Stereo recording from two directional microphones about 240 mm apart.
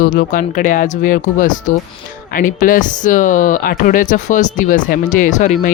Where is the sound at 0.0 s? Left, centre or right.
Left.